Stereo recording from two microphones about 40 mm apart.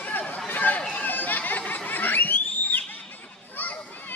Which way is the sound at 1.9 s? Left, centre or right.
Left.